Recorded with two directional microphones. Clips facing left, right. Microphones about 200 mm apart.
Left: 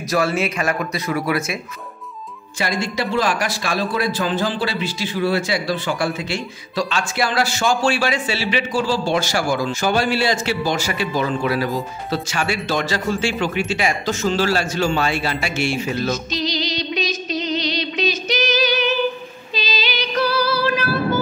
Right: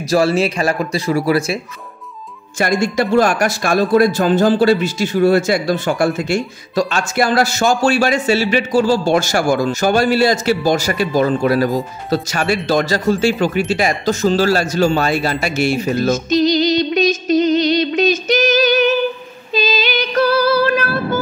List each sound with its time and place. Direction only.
0.0 s speech: 30° right (ahead or behind)
2.6 s speech: 45° right (ahead or behind)
19.5 s female singing: 50° right (ahead or behind)